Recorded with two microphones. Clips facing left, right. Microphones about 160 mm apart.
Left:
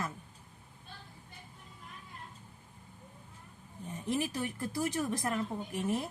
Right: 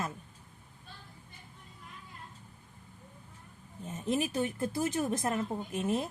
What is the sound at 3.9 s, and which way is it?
A woman's voice, 25° right (ahead or behind).